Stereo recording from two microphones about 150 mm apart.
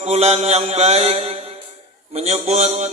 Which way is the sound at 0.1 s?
45° right (ahead or behind).